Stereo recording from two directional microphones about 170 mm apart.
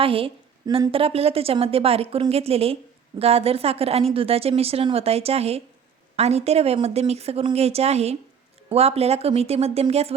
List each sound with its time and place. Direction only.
0.0 s a woman's voice: 35° right (ahead or behind)